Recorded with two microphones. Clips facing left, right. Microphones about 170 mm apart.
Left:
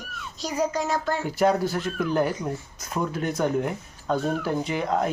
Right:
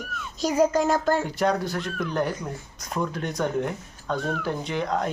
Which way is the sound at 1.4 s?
5° left (ahead or behind).